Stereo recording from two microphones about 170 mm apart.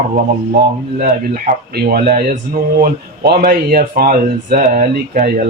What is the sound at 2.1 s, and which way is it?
Speech, 55° right (ahead or behind).